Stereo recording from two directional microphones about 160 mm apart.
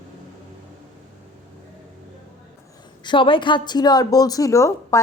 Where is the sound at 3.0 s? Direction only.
30° left (ahead or behind).